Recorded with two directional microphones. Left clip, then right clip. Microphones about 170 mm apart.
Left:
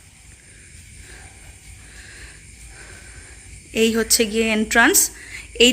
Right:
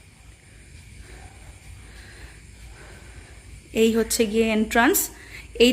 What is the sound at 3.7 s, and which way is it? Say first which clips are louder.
A woman's voice: left 2 dB; 5° right (ahead or behind).